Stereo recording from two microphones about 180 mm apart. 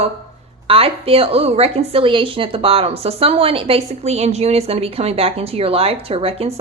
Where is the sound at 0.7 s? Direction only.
30° right (ahead or behind).